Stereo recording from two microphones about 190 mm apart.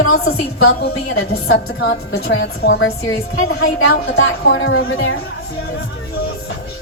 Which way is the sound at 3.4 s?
90° left.